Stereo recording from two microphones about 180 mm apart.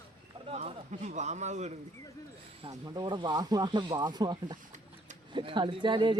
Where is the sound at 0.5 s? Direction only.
40° right (ahead or behind).